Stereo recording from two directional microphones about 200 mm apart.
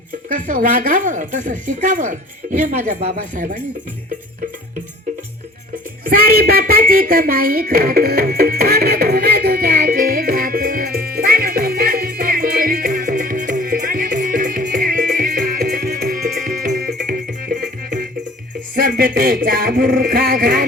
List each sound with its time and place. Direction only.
0.3 s a woman's voice: 40° right (ahead or behind)
6.1 s a sound: 50° right (ahead or behind)
16.6 s music: 50° right (ahead or behind)
18.7 s speech: 45° right (ahead or behind)